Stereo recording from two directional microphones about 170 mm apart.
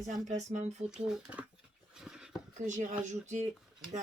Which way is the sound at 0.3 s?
45° right (ahead or behind).